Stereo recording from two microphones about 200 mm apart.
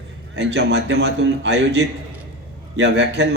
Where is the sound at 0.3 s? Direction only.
60° right (ahead or behind).